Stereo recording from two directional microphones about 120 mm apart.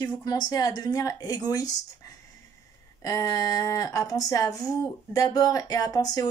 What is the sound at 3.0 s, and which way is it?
Speech, 30° left (ahead or behind).